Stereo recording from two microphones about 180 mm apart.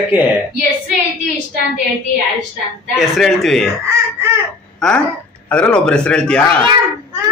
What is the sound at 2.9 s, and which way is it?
Speech, centre (ahead or behind).